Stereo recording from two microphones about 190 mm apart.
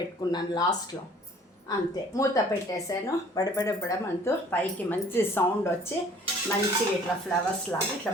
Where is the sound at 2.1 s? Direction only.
15° left (ahead or behind).